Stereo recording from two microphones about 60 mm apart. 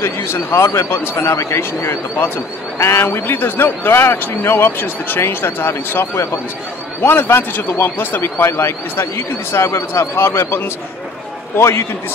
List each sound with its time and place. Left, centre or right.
0.0 s a man's voice: left